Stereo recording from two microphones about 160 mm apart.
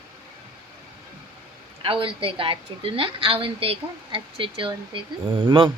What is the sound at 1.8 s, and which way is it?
A woman's voice, 35° right (ahead or behind).